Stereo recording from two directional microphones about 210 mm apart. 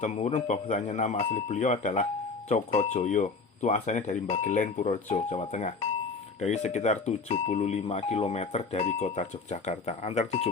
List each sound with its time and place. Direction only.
0.0 s speech: 30° left (ahead or behind)